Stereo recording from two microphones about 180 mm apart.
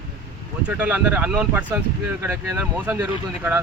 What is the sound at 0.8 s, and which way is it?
Speech, 10° right (ahead or behind).